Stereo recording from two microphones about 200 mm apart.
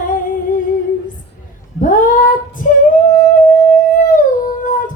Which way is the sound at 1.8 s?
40° left (ahead or behind).